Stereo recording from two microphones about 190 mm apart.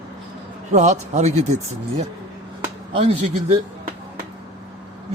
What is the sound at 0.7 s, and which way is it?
A man's voice, 40° right (ahead or behind).